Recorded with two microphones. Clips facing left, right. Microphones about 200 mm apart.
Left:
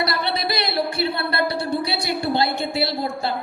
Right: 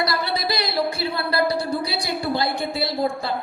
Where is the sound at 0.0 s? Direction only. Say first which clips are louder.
Even; 30° left (ahead or behind).